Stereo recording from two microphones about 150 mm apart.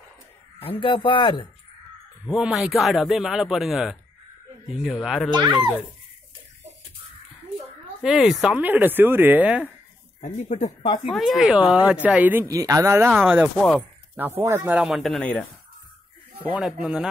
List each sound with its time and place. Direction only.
0.6 s speech: 35° left (ahead or behind)
2.2 s a man's voice: 5° right (ahead or behind)
5.3 s speech: 30° right (ahead or behind)
8.0 s speech: 5° right (ahead or behind)
10.2 s speech: 50° left (ahead or behind)
11.1 s a man's voice: centre (ahead or behind)
13.6 s a man's voice: 5° left (ahead or behind)
14.1 s speech: 15° right (ahead or behind); by 15.4 s 5° left (ahead or behind)
16.5 s a man's voice: 5° right (ahead or behind)